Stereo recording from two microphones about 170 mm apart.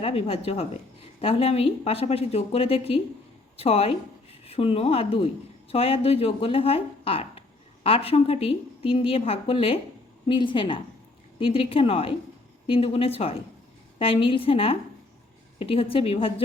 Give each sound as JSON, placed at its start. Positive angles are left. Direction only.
{"t": 0.0, "sound": "a woman's voice", "side_deg": 35}